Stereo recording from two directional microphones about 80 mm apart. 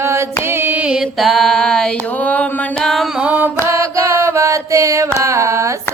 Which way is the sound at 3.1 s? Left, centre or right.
Centre.